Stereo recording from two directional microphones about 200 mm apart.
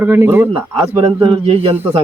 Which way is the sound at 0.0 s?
10° right (ahead or behind).